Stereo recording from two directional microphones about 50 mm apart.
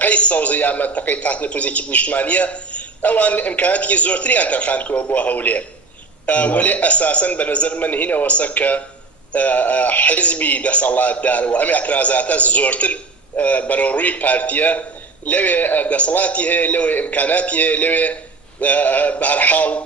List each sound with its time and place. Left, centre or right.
0.0 s a man's voice: left